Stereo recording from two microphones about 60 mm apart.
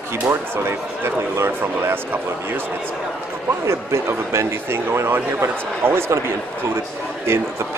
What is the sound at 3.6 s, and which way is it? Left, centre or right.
Speech, right.